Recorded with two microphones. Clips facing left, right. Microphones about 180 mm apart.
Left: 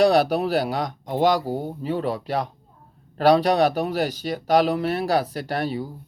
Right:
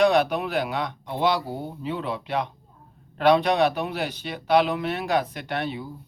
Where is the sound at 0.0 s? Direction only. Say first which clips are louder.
Left 2 dB; 35° left (ahead or behind).